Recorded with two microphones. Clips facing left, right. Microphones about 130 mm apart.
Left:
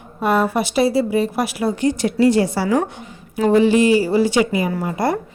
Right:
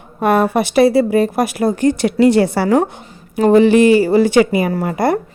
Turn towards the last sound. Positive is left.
turn(degrees=-60)  # may be behind; listen again after turning